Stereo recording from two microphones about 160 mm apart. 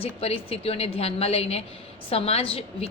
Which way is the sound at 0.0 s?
40° left (ahead or behind).